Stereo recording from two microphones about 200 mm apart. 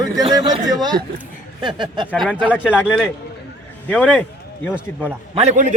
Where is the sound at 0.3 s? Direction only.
20° right (ahead or behind).